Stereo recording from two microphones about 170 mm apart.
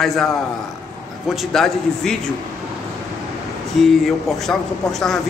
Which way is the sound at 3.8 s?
Centre (ahead or behind).